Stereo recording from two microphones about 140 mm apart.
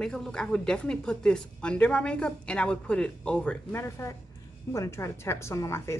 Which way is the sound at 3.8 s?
20° left (ahead or behind).